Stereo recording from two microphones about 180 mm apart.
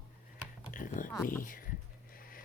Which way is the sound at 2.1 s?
55° left (ahead or behind).